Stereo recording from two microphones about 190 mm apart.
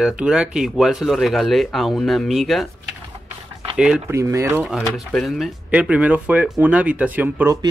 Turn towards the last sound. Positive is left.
turn(degrees=-15)  # may be behind; listen again after turning